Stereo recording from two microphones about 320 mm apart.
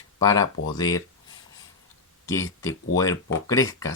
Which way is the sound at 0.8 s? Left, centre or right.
Centre.